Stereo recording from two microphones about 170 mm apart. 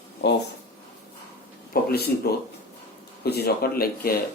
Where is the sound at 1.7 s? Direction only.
65° left (ahead or behind).